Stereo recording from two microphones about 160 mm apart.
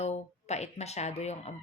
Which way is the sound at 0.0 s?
45° left (ahead or behind).